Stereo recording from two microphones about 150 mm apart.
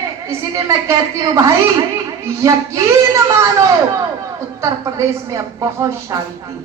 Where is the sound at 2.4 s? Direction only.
20° right (ahead or behind).